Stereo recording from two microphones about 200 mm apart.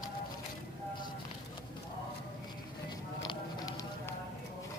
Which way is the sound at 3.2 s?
20° left (ahead or behind).